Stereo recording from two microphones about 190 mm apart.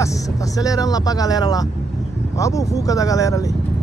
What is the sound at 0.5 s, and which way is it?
Speech, 20° left (ahead or behind).